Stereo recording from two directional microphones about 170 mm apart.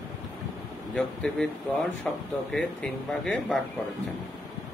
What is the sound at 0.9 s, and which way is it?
Speech, 5° left (ahead or behind).